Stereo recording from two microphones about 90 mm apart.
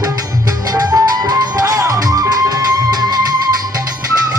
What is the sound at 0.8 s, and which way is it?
Music, 45° right (ahead or behind).